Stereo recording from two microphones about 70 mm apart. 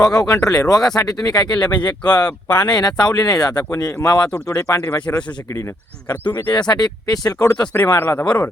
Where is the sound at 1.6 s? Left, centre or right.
Left.